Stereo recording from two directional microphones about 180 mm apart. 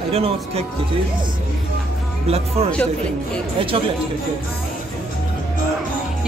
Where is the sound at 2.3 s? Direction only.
35° right (ahead or behind).